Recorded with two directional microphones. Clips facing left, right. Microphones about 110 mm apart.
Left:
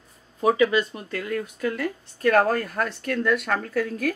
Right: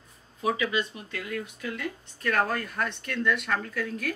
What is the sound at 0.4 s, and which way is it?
Speech, 45° left (ahead or behind).